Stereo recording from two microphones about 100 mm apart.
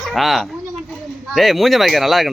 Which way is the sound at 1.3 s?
Centre (ahead or behind).